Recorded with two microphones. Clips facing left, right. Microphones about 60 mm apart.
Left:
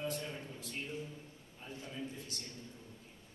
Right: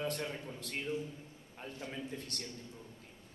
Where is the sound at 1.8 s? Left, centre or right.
Right.